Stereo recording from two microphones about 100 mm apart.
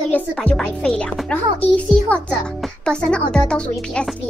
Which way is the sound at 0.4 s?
5° left (ahead or behind).